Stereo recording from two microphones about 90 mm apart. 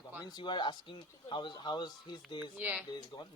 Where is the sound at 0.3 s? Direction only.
55° left (ahead or behind).